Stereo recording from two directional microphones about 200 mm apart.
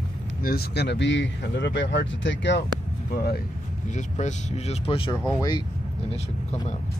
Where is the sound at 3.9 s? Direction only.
35° left (ahead or behind).